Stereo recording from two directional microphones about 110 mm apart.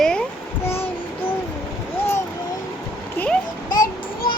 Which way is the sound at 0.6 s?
20° left (ahead or behind).